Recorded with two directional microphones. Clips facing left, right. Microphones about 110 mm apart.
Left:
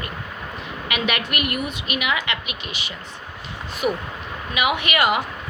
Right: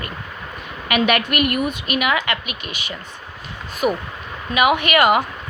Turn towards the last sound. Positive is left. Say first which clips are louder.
# right 5 dB
turn(degrees=-50)  # may be behind; listen again after turning